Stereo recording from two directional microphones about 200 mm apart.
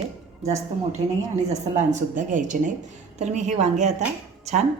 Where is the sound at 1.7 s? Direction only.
35° right (ahead or behind).